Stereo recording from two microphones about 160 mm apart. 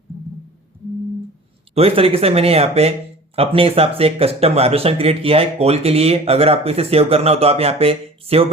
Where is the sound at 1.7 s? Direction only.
35° right (ahead or behind).